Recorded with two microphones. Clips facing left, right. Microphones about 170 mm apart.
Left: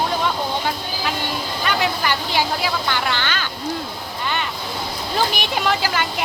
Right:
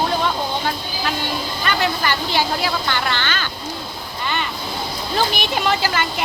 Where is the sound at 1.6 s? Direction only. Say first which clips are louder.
Even; 10° left (ahead or behind).